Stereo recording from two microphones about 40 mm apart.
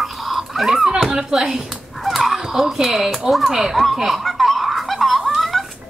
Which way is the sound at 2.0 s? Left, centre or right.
Centre.